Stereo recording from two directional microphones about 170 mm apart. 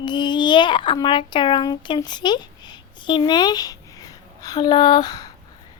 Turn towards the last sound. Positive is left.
turn(degrees=20)  # may be behind; listen again after turning